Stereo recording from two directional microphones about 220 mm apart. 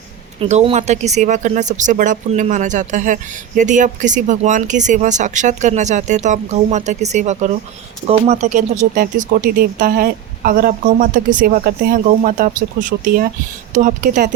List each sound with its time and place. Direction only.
0.3 s speech: 30° right (ahead or behind)